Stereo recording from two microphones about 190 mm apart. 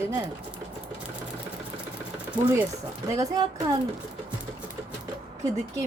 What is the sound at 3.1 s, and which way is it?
Speech, 15° right (ahead or behind).